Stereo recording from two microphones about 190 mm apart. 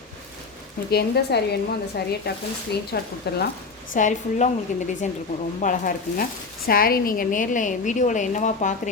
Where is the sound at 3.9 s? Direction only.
40° left (ahead or behind).